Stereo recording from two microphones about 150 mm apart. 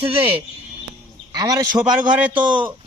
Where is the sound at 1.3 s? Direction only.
25° right (ahead or behind).